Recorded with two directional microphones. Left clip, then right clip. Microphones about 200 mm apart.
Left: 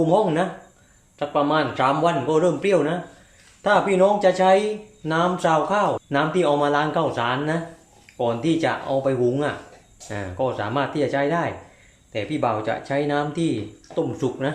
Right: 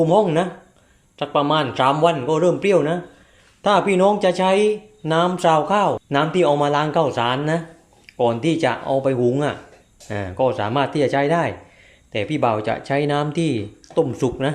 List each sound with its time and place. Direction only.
0.0 s speech: 35° right (ahead or behind)